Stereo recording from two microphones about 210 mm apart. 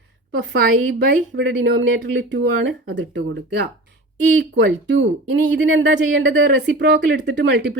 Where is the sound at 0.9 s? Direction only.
55° right (ahead or behind).